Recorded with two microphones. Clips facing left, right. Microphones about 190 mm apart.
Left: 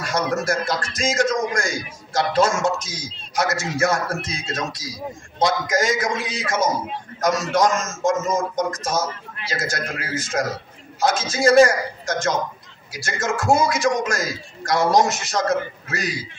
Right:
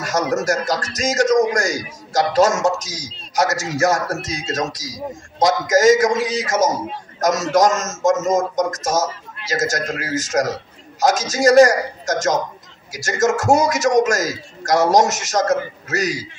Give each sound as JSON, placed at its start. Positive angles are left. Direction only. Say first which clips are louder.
{"t": 0.0, "sound": "a man's voice", "louder": "right 3 dB", "side_deg": -40}